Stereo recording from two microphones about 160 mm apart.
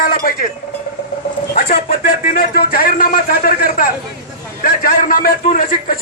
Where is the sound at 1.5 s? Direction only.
60° left (ahead or behind).